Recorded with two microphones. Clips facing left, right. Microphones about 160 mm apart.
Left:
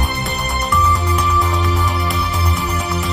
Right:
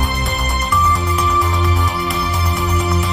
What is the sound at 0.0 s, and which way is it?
Music, centre (ahead or behind).